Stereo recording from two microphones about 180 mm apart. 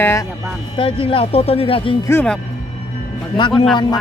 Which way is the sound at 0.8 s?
30° left (ahead or behind).